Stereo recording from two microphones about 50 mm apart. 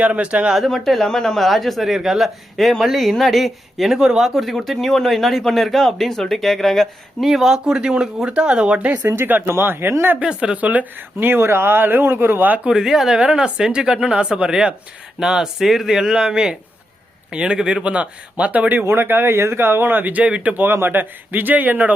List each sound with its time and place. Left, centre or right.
0.0 s speech: right
0.5 s speech: centre
7.3 s speech: centre; by 9.0 s right
9.1 s speech: right
10.2 s speech: centre
10.6 s speech: right
11.2 s speech: right
12.6 s speech: centre
18.7 s speech: right
20.7 s speech: right